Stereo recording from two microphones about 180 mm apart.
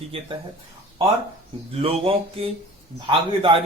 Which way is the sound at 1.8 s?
30° right (ahead or behind).